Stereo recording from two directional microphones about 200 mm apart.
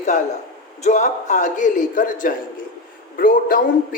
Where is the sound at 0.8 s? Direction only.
35° left (ahead or behind).